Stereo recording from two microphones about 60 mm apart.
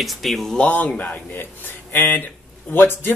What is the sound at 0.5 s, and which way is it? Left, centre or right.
Speech, left.